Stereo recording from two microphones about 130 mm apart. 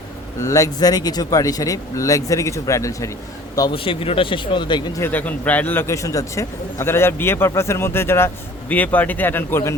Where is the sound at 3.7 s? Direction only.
45° left (ahead or behind).